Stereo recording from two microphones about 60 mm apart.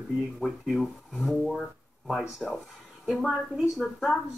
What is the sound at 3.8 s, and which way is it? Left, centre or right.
Speech, centre.